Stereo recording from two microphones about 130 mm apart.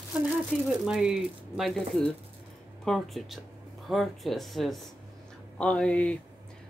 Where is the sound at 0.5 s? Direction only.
5° right (ahead or behind).